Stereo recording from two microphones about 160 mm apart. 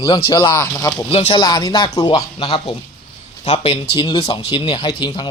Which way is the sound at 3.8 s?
30° left (ahead or behind).